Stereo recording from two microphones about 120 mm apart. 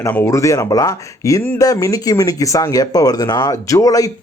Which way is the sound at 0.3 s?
25° left (ahead or behind).